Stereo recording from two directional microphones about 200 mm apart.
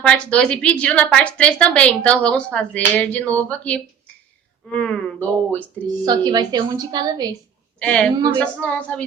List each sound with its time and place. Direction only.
0.0 s a woman's voice: 5° left (ahead or behind)
6.1 s a woman's voice: 20° right (ahead or behind)
7.8 s a woman's voice: 5° left (ahead or behind)